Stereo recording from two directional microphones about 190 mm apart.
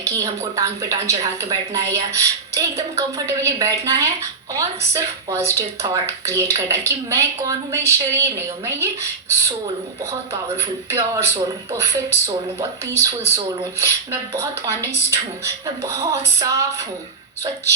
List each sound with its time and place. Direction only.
0.0 s a woman's voice: 15° right (ahead or behind)
10.6 s a woman's voice: 15° right (ahead or behind)